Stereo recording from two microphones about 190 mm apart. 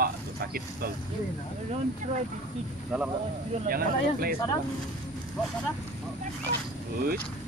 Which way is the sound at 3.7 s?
50° right (ahead or behind).